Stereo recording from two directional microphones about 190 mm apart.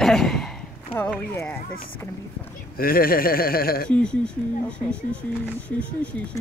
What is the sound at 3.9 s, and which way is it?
Speech, 5° left (ahead or behind).